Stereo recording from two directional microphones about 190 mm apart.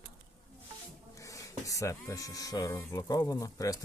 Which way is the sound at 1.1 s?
15° left (ahead or behind).